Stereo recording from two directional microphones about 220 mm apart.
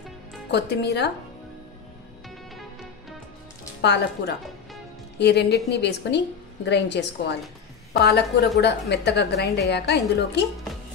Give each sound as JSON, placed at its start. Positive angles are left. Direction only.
{"t": 0.5, "sound": "a woman's voice", "side_deg": 50}
{"t": 2.5, "sound": "music", "side_deg": 0}
{"t": 3.8, "sound": "a woman's voice", "side_deg": 50}